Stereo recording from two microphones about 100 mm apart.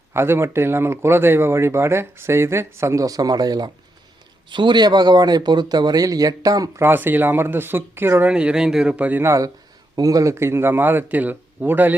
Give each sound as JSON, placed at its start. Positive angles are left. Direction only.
{"t": 0.1, "sound": "speech", "side_deg": -25}
{"t": 6.8, "sound": "speech", "side_deg": -20}
{"t": 8.3, "sound": "speech", "side_deg": -10}
{"t": 9.9, "sound": "speech", "side_deg": -35}